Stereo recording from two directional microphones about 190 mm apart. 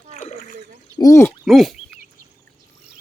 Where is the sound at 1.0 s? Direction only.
15° left (ahead or behind).